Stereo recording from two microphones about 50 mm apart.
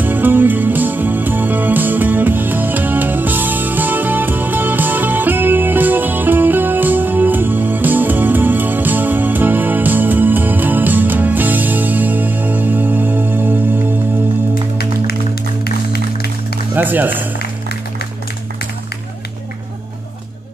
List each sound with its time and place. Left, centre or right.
0.0 s music: right
16.7 s music: right